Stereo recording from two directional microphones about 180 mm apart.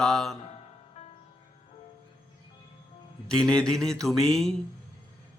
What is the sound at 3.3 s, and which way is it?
Speech, 5° left (ahead or behind).